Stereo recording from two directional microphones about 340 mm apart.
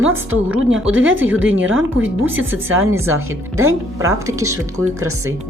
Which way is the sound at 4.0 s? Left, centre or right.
Centre.